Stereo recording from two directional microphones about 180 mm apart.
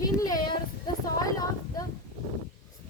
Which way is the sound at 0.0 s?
20° left (ahead or behind).